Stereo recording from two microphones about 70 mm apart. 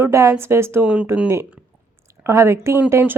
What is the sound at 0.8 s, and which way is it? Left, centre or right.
Speech, centre.